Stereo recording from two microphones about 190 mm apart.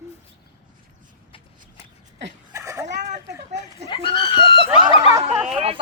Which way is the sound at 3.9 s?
25° left (ahead or behind).